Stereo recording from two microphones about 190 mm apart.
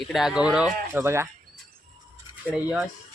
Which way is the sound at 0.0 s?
Centre (ahead or behind).